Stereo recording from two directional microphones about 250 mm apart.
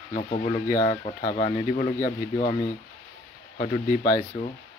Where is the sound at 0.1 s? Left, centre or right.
Left.